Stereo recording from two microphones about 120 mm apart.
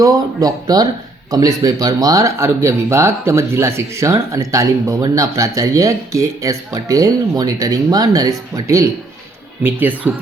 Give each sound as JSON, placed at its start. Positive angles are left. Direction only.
{"t": 0.0, "sound": "speech", "side_deg": -30}
{"t": 9.6, "sound": "speech", "side_deg": -15}